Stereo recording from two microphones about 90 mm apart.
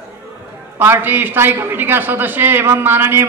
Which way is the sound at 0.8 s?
25° right (ahead or behind).